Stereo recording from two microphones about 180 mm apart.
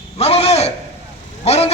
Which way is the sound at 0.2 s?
35° left (ahead or behind).